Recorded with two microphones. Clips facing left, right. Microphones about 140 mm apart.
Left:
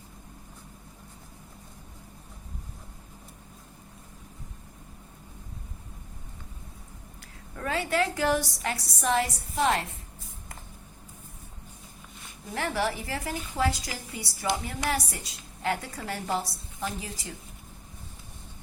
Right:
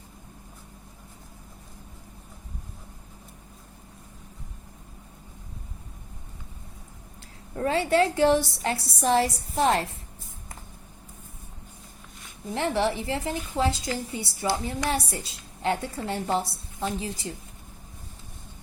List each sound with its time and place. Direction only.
7.5 s a woman's voice: 30° right (ahead or behind)
12.5 s a woman's voice: 25° right (ahead or behind)